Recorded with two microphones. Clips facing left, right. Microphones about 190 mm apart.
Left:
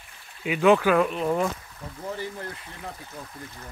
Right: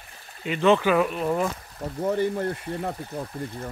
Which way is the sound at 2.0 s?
55° right (ahead or behind).